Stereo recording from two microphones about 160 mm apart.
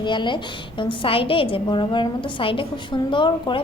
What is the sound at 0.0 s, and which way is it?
A woman's voice, 30° left (ahead or behind).